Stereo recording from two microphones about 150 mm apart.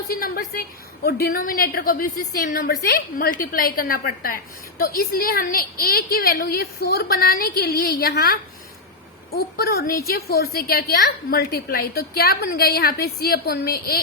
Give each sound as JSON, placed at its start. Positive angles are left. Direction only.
{"t": 0.1, "sound": "a woman's voice", "side_deg": 75}
{"t": 1.0, "sound": "a woman's voice", "side_deg": 85}